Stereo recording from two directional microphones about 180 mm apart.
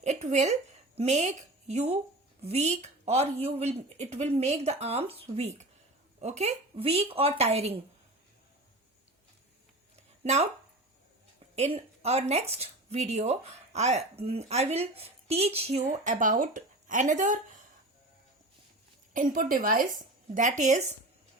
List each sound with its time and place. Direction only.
0.0 s a sound: 40° right (ahead or behind)
0.9 s a woman's voice: 40° right (ahead or behind)
10.2 s speech: 40° right (ahead or behind)
11.5 s speech: 35° right (ahead or behind)
19.1 s speech: 50° right (ahead or behind)